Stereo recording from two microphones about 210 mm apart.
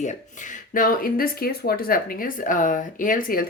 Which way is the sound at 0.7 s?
40° left (ahead or behind).